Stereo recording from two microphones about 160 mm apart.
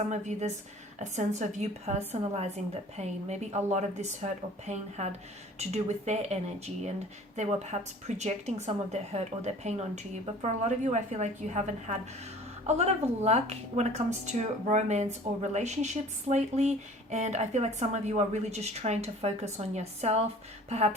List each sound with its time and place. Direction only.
0.1 s a woman's voice: 45° right (ahead or behind)